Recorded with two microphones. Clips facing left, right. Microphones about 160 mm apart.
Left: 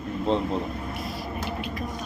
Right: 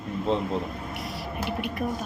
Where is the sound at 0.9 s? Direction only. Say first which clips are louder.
Left 1 dB; 75° right (ahead or behind).